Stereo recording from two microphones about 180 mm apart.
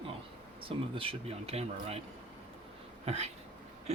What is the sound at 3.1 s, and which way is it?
Speech, 35° right (ahead or behind).